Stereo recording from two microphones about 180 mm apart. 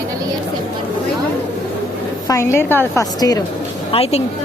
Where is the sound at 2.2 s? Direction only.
15° left (ahead or behind).